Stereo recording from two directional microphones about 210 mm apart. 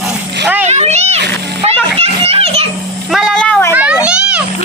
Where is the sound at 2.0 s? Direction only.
30° right (ahead or behind).